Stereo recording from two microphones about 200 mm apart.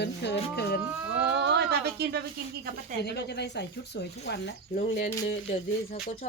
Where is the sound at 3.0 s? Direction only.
55° left (ahead or behind).